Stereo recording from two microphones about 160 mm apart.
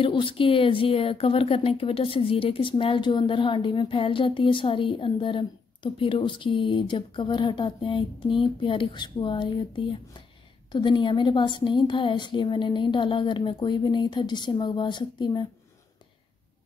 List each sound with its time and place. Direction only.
0.0 s a woman's voice: 30° left (ahead or behind)